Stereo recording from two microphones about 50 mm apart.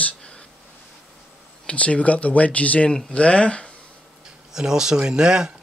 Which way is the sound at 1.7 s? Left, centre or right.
Left.